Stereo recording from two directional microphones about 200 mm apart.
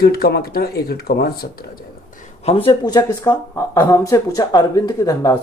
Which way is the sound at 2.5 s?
25° left (ahead or behind).